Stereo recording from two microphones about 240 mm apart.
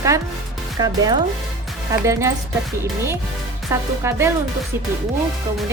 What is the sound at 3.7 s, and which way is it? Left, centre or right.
Speech, centre.